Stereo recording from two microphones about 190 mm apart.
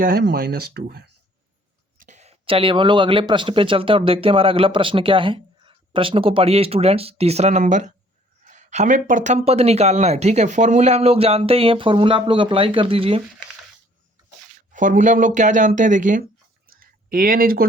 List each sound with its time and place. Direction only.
0.0 s speech: 55° right (ahead or behind)
2.0 s speech: 40° right (ahead or behind)
14.7 s speech: 40° right (ahead or behind)